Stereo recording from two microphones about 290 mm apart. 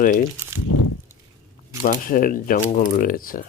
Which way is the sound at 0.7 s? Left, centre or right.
Left.